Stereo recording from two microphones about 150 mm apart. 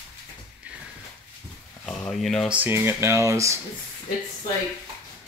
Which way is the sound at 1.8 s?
5° left (ahead or behind).